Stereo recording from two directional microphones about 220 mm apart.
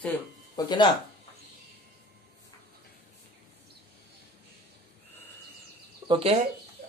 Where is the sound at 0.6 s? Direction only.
15° left (ahead or behind).